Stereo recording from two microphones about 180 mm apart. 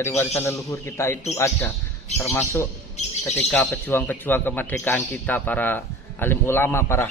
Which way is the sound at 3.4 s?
10° left (ahead or behind).